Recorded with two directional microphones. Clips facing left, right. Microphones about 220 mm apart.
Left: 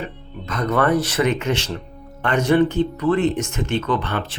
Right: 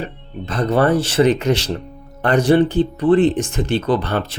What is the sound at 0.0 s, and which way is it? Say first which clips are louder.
Speech: right 3 dB; 30° right (ahead or behind).